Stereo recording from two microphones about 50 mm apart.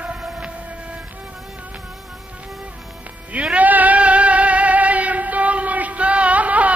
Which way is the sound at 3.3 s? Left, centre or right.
Right.